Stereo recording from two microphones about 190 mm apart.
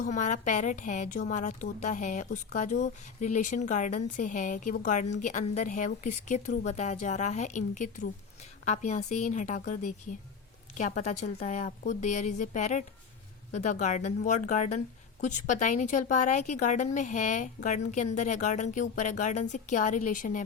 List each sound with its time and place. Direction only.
0.0 s a woman's voice: 40° left (ahead or behind)